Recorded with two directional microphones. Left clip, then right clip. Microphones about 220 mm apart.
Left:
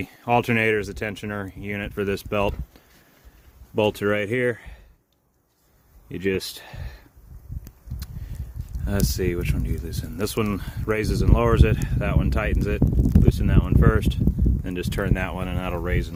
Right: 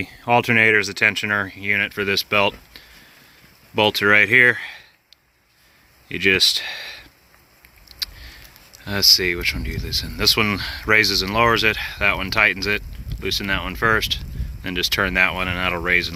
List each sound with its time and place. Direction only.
0.0 s speech: 15° left (ahead or behind)
6.1 s speech: 10° left (ahead or behind)
8.8 s speech: 20° left (ahead or behind)